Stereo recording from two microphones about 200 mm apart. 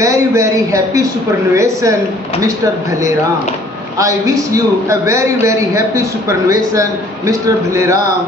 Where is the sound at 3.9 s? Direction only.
15° right (ahead or behind).